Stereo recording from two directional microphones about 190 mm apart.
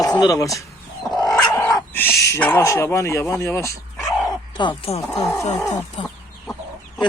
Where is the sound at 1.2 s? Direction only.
20° left (ahead or behind).